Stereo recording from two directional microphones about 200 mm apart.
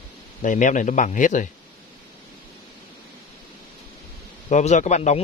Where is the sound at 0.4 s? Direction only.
40° left (ahead or behind).